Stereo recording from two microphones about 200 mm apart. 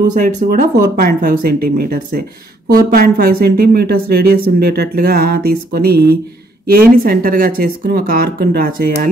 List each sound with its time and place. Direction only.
0.0 s speech: 40° right (ahead or behind)